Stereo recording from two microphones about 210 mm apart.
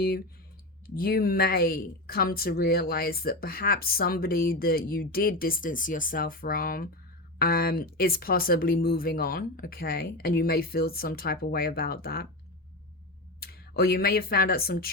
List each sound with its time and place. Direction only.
0.9 s speech: 45° left (ahead or behind)
13.4 s speech: 50° left (ahead or behind)